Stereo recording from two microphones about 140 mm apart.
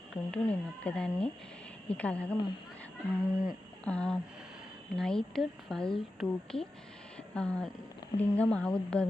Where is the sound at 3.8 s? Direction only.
10° left (ahead or behind).